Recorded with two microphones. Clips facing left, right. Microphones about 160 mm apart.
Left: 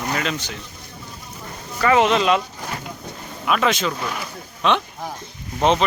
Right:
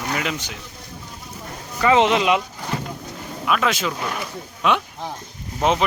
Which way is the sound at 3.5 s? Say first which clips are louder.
Left 1 dB; centre (ahead or behind).